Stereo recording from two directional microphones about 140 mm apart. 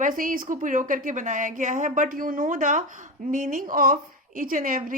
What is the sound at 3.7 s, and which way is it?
A woman's voice, 90° right.